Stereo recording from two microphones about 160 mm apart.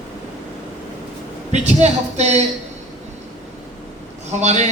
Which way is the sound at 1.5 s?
45° right (ahead or behind).